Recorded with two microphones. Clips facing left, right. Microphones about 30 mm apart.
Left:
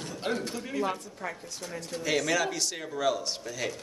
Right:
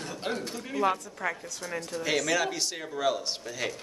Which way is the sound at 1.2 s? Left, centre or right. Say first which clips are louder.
Right 4 dB; right.